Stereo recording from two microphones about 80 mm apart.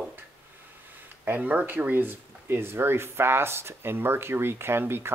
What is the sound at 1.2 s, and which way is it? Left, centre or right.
Speech, right.